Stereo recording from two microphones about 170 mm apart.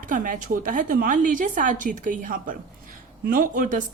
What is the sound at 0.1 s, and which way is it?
Speech, 50° right (ahead or behind).